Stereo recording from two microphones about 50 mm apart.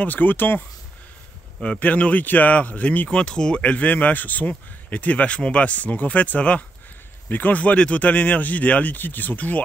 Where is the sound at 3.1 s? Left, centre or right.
Centre.